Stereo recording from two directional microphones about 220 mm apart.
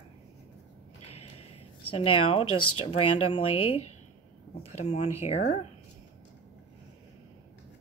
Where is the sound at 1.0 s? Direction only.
90° left.